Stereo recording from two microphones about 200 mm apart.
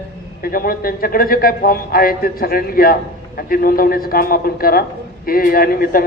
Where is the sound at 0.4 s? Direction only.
45° left (ahead or behind).